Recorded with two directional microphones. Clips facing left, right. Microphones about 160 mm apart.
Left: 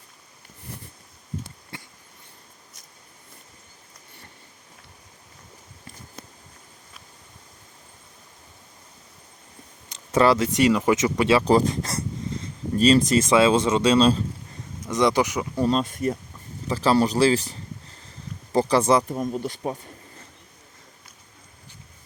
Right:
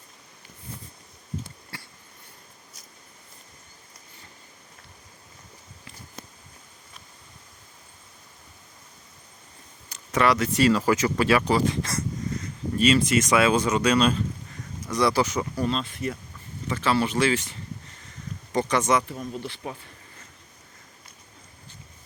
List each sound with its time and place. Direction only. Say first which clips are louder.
1.7 s sniff: left 2 dB; 20° left (ahead or behind)
9.9 s speech: left 4 dB; 30° left (ahead or behind)
11.4 s speech: left 4 dB; 40° left (ahead or behind); by 15.6 s 15° left (ahead or behind)
15.6 s speech: left 9 dB; 45° left (ahead or behind)
19.0 s speech: left 6 dB; 45° left (ahead or behind)